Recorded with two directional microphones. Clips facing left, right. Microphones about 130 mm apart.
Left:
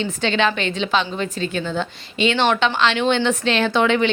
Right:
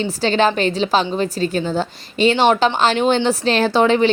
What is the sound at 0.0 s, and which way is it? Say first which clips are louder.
A woman's voice: right 3 dB; 35° right (ahead or behind).